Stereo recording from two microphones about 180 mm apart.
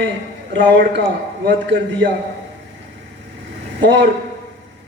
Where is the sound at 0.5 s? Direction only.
80° right.